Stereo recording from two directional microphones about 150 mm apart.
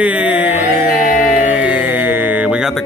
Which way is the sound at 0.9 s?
60° left (ahead or behind).